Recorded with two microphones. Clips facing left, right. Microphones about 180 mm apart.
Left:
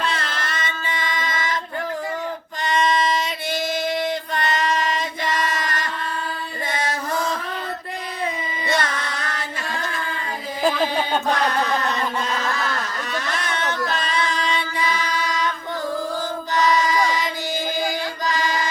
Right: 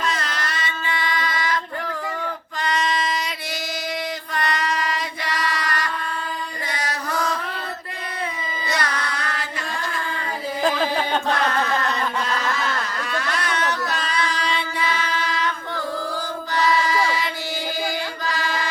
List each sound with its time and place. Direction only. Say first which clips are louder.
0.3 s child singing: even; 20° left (ahead or behind)
4.5 s child singing: left 3 dB; 25° left (ahead or behind)
5.3 s female singing: even; 45° left (ahead or behind)
6.7 s music: left 2 dB; 25° left (ahead or behind)
8.7 s music: left 2 dB; 25° left (ahead or behind)
10.6 s music: left 1 dB; 10° left (ahead or behind)
13.5 s a sound: right 1 dB; 25° left (ahead or behind)
14.2 s music: even; 20° left (ahead or behind)
16.5 s music: left 1 dB; 20° left (ahead or behind)
18.3 s chant: left 4 dB; 20° left (ahead or behind)